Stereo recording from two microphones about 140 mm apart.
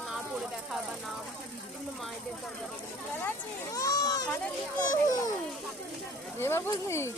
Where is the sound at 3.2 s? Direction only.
25° left (ahead or behind).